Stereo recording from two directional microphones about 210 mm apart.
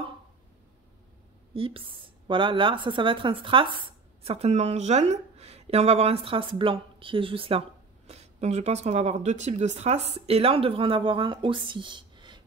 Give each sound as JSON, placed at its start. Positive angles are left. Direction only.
{"t": 1.5, "sound": "speech", "side_deg": -25}